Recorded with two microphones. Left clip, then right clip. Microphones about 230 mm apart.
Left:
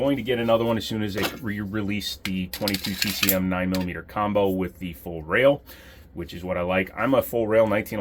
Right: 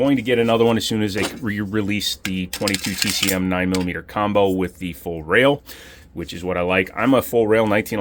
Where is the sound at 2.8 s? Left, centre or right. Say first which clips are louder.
Right 4 dB; right.